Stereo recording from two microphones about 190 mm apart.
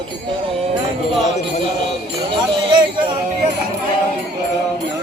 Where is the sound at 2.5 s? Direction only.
25° right (ahead or behind).